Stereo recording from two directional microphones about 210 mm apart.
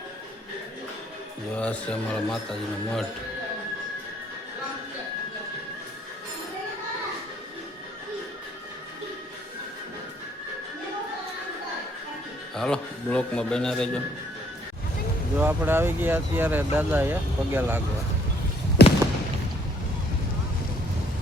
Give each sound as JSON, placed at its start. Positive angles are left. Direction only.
{"t": 1.5, "sound": "speech", "side_deg": 5}
{"t": 12.5, "sound": "speech", "side_deg": 5}
{"t": 15.4, "sound": "speech", "side_deg": -10}
{"t": 18.8, "sound": "a sound", "side_deg": 50}